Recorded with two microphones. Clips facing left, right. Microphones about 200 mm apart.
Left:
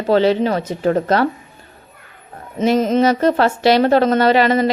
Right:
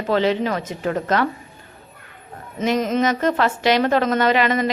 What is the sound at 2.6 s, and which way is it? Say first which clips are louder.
A woman's voice: left 5 dB; 30° left (ahead or behind).